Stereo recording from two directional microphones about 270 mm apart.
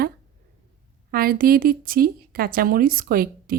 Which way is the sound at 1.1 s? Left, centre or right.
Right.